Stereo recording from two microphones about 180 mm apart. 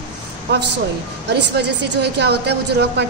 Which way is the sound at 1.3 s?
70° right (ahead or behind).